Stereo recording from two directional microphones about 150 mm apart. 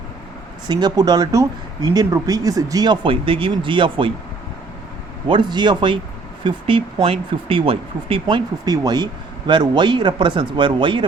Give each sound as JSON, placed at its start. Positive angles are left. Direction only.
{"t": 0.7, "sound": "speech", "side_deg": -30}
{"t": 5.3, "sound": "speech", "side_deg": -30}
{"t": 8.6, "sound": "speech", "side_deg": -25}